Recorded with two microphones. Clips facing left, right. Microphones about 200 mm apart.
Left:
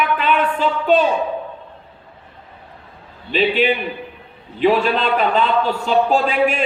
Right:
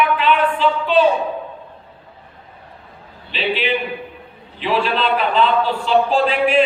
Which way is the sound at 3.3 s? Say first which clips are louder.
Left 4 dB; 45° left (ahead or behind).